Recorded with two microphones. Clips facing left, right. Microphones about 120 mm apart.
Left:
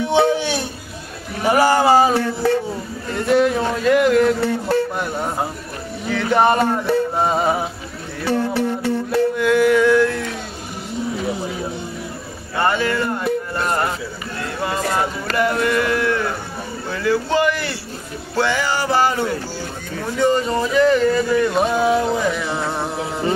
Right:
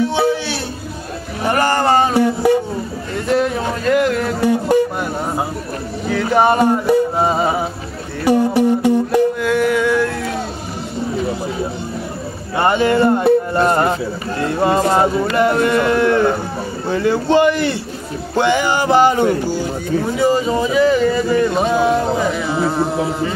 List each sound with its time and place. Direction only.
0.2 s music: 5° right (ahead or behind)
1.5 s a sound: 5° left (ahead or behind)
2.1 s music: 15° right (ahead or behind)
3.3 s speech: centre (ahead or behind)
4.4 s music: 15° right (ahead or behind)
6.0 s speech: centre (ahead or behind)
8.3 s music: 15° right (ahead or behind)
9.4 s a sound: centre (ahead or behind)
12.5 s speech: 20° right (ahead or behind)
20.2 s speech: 5° right (ahead or behind)